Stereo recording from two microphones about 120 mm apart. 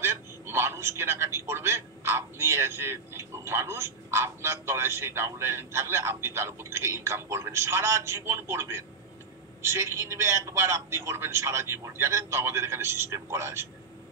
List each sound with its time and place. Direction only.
0.0 s a man's voice: 20° right (ahead or behind)